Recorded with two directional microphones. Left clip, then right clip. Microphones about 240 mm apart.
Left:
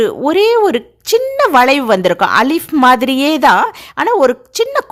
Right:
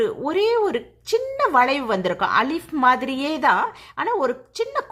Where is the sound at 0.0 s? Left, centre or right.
Left.